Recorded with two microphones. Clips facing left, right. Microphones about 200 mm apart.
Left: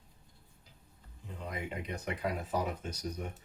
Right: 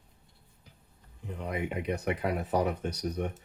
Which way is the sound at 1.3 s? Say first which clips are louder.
Right 6 dB; 65° right (ahead or behind).